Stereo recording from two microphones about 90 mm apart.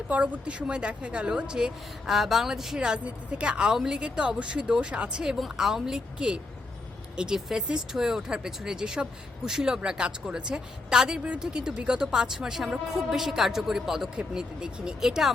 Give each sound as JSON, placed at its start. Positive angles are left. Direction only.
{"t": 0.1, "sound": "speech", "side_deg": -15}